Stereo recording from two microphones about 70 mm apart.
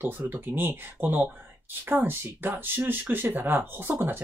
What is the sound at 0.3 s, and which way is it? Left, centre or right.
Speech, right.